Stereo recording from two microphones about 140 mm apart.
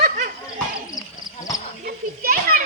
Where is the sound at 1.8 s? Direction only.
90° right.